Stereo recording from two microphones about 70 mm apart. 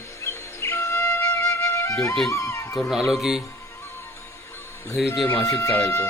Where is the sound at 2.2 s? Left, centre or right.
Left.